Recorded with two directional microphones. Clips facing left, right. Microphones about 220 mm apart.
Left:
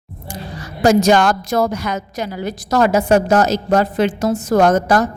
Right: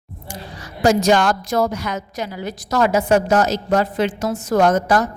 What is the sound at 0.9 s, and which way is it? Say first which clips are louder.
A woman's voice: left 3 dB; 45° left (ahead or behind).